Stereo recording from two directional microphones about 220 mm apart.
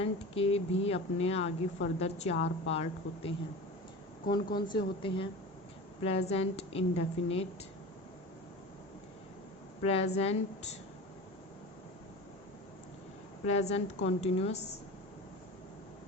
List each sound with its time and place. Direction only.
0.0 s speech: 25° left (ahead or behind)
4.4 s speech: 40° left (ahead or behind)
4.7 s speech: 20° left (ahead or behind)
9.8 s speech: 30° left (ahead or behind)
13.4 s speech: 30° left (ahead or behind)